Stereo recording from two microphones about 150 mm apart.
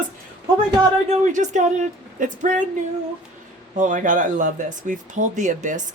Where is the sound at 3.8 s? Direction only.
60° right (ahead or behind).